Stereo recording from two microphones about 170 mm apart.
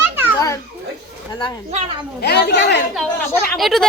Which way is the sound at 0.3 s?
20° left (ahead or behind).